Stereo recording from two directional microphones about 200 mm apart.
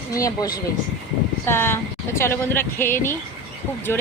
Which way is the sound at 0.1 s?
15° left (ahead or behind).